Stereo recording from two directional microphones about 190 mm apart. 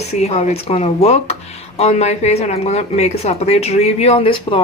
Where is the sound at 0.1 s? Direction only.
35° left (ahead or behind).